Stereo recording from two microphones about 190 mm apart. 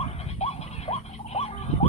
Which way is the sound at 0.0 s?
35° left (ahead or behind).